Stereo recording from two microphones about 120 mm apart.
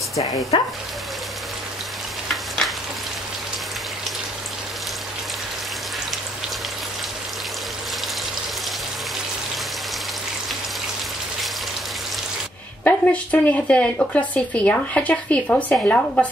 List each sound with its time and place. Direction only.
0.5 s speech: 50° left (ahead or behind)
12.8 s speech: 10° left (ahead or behind)